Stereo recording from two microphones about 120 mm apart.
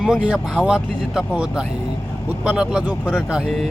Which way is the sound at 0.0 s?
5° right (ahead or behind).